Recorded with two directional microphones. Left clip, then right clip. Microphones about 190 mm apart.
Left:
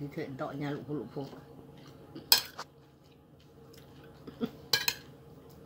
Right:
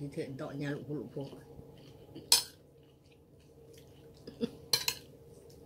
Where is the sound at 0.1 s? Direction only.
Centre (ahead or behind).